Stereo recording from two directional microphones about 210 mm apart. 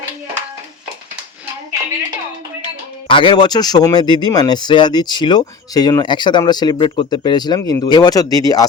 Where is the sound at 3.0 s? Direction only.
25° left (ahead or behind).